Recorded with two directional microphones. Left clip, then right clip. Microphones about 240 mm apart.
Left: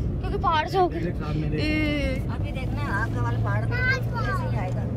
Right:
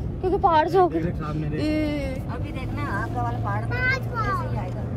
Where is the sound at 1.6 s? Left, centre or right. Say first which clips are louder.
Even; centre.